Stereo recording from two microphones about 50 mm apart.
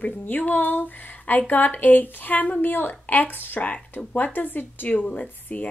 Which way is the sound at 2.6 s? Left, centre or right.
Left.